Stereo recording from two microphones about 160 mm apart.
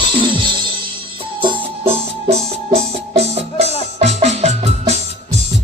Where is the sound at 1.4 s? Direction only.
35° right (ahead or behind).